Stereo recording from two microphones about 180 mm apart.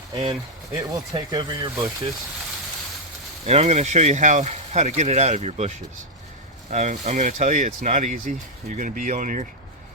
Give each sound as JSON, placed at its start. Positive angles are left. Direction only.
{"t": 0.1, "sound": "speech", "side_deg": -30}
{"t": 3.4, "sound": "speech", "side_deg": -40}